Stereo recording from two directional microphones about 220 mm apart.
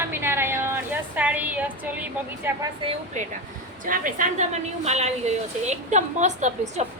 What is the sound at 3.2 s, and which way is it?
A woman's voice, 35° right (ahead or behind).